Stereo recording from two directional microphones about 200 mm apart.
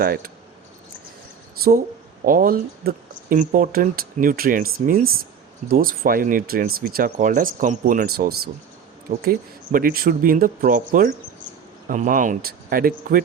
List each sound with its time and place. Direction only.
0.0 s speech: 50° right (ahead or behind)
2.2 s speech: 45° right (ahead or behind)